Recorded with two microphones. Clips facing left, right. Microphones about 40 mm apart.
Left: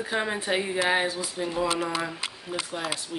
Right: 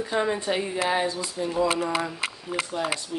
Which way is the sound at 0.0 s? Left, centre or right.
Centre.